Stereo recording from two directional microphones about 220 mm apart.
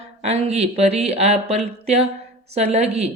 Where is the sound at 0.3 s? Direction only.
30° right (ahead or behind).